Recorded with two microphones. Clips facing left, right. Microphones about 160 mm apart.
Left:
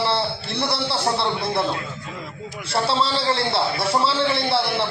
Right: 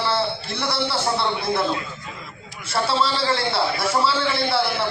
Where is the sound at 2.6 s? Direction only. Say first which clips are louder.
Even; 30° left (ahead or behind).